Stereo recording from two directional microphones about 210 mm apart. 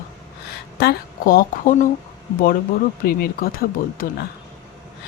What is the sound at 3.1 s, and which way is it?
Speech, 45° left (ahead or behind).